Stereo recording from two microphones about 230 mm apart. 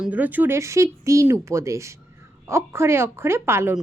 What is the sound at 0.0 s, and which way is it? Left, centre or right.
A woman's voice, centre.